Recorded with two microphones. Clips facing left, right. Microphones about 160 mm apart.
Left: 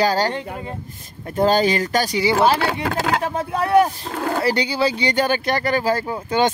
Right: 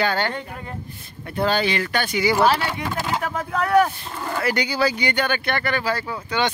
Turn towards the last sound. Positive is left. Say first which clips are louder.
# left 5 dB
turn(degrees=45)  # may be behind; listen again after turning